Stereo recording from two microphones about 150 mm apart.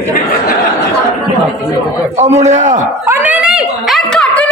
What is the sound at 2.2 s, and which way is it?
Speech, 45° right (ahead or behind).